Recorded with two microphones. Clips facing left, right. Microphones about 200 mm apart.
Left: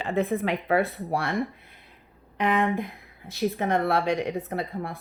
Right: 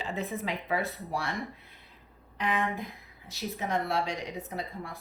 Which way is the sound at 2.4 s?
55° left (ahead or behind).